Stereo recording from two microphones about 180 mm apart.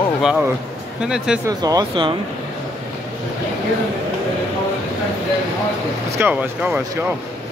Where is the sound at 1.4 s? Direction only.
20° right (ahead or behind).